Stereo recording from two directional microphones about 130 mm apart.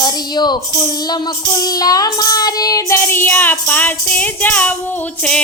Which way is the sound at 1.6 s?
30° left (ahead or behind).